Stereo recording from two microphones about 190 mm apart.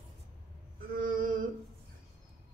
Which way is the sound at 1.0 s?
45° right (ahead or behind).